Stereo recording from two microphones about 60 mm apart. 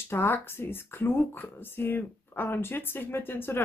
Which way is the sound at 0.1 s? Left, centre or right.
Left.